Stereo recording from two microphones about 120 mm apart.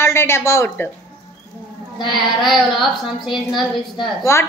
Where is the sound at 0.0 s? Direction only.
20° left (ahead or behind).